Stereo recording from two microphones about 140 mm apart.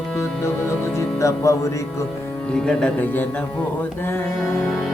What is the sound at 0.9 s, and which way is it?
Speech, 20° left (ahead or behind).